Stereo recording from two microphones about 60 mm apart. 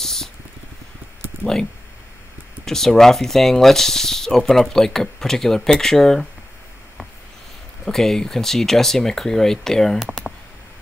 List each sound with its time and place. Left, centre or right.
0.0 s a sound: centre
2.6 s speech: centre
7.8 s speech: centre